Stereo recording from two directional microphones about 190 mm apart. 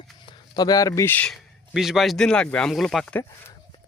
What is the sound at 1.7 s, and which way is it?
Speech, centre (ahead or behind).